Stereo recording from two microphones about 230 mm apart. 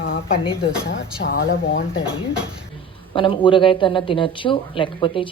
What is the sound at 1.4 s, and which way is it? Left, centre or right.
Speech, left.